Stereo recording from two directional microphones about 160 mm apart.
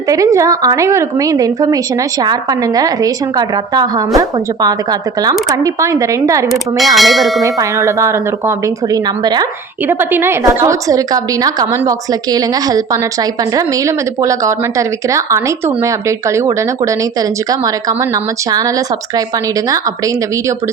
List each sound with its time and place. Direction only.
0.1 s a woman's voice: 20° right (ahead or behind)
6.5 s speech: centre (ahead or behind)
7.4 s a woman's voice: 20° right (ahead or behind)
9.8 s a woman's voice: 15° right (ahead or behind)